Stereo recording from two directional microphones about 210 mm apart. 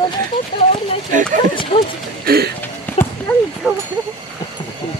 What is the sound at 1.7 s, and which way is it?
Speech, 25° left (ahead or behind).